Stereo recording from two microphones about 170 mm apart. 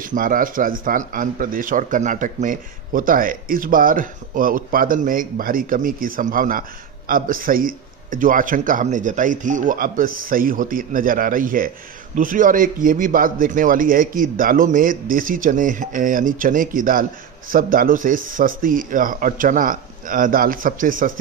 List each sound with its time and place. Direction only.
0.0 s a man's voice: 55° right (ahead or behind)